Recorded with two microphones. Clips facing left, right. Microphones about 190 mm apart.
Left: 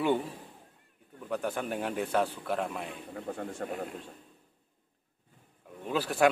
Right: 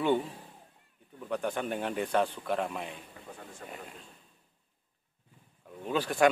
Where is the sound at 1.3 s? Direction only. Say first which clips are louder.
Even; 5° left (ahead or behind).